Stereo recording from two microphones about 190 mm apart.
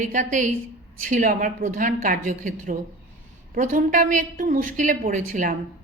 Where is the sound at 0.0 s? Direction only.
40° right (ahead or behind).